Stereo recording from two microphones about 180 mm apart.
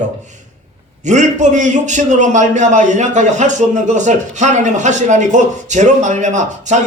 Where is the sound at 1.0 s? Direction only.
40° right (ahead or behind).